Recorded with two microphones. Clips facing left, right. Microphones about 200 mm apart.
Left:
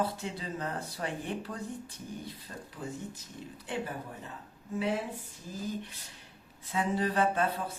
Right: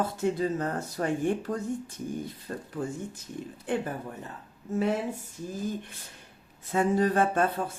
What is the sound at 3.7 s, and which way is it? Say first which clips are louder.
Speech: right 6 dB; 50° right (ahead or behind).